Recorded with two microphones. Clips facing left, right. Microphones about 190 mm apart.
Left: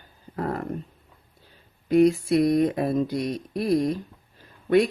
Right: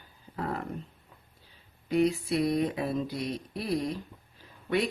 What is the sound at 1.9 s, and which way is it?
A woman's voice, 50° left (ahead or behind).